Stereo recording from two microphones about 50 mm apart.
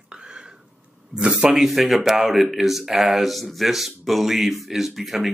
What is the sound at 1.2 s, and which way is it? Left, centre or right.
Speech, right.